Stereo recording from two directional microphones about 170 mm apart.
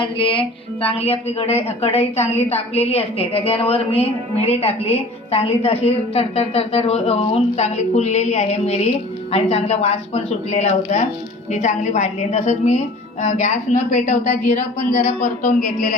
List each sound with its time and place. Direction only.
0.0 s a woman's voice: 30° left (ahead or behind); by 16.0 s 50° left (ahead or behind)